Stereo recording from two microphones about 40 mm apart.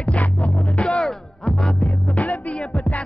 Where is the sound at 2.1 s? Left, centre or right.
Left.